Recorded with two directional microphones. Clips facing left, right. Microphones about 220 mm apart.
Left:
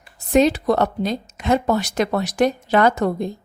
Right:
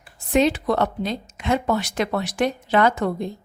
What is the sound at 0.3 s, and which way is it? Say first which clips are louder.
A woman's voice: left 3 dB; 40° left (ahead or behind).